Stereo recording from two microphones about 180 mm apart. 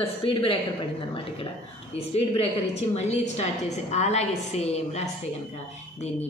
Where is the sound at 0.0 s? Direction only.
30° left (ahead or behind).